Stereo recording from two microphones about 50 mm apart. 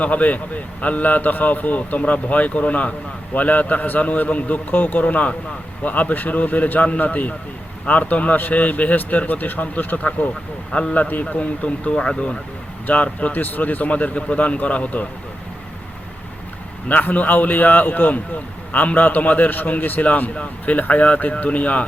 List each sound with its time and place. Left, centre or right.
0.0 s a man's voice: left
10.9 s a man's voice: left
16.9 s a man's voice: left